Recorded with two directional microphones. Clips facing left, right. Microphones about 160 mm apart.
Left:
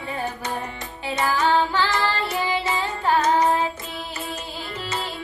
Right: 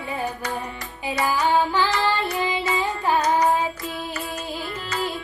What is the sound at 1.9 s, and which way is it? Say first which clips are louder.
Child singing: right 1 dB; 25° left (ahead or behind).